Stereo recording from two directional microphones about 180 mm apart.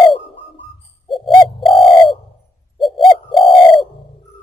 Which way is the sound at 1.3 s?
25° left (ahead or behind).